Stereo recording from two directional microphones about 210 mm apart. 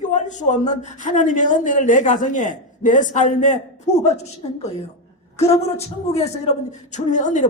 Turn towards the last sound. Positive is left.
turn(degrees=35)  # may be behind; listen again after turning